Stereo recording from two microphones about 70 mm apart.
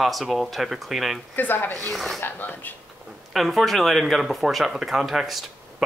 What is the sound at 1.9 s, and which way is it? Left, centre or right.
Speech, centre.